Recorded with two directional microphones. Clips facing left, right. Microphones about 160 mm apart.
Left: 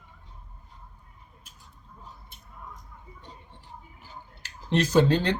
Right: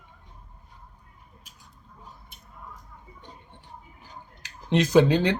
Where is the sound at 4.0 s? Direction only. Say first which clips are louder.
Even; 15° right (ahead or behind).